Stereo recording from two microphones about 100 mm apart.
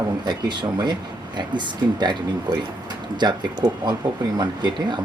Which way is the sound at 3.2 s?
45° right (ahead or behind).